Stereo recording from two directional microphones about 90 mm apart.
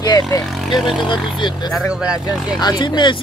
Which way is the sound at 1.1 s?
60° left (ahead or behind).